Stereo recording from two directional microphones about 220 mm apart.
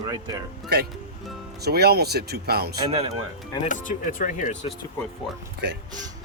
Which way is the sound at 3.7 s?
35° left (ahead or behind).